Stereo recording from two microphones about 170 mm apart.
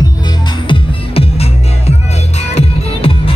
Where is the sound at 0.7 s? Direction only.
35° left (ahead or behind).